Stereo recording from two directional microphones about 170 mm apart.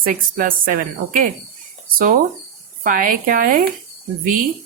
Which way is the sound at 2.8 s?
50° right (ahead or behind).